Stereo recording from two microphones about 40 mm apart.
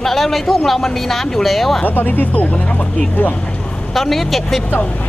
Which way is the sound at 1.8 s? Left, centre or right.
Left.